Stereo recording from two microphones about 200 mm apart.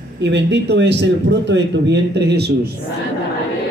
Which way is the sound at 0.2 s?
60° right (ahead or behind).